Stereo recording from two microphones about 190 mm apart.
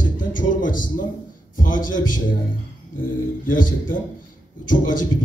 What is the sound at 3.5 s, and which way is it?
A man's voice, 45° left (ahead or behind).